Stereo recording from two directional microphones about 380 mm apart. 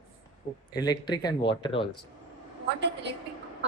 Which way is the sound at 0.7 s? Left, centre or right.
Centre.